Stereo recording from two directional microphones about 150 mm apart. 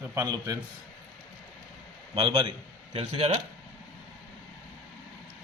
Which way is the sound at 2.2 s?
35° right (ahead or behind).